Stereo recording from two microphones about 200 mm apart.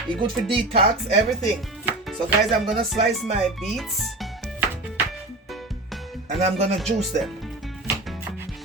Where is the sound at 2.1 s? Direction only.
Centre (ahead or behind).